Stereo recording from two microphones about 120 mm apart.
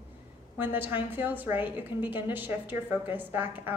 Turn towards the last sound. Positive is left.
turn(degrees=-15)  # may be behind; listen again after turning